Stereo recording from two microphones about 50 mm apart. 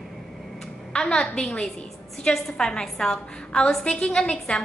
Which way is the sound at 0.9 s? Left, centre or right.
Centre.